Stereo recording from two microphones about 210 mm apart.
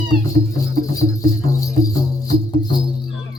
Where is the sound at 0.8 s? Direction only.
15° left (ahead or behind).